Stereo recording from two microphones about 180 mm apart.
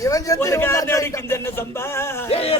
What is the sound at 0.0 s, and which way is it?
A man's voice, 20° left (ahead or behind).